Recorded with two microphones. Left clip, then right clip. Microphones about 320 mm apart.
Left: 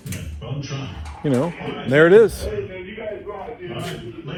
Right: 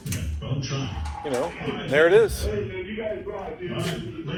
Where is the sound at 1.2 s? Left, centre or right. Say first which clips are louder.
Left 5 dB; left.